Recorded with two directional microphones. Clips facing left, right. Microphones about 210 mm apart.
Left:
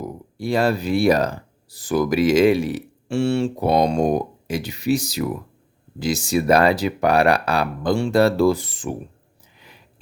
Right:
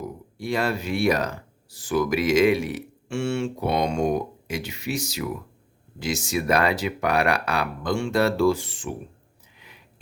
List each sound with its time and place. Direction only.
0.3 s speech: 35° left (ahead or behind)